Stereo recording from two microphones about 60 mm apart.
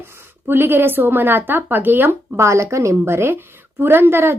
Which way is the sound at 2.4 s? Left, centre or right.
Right.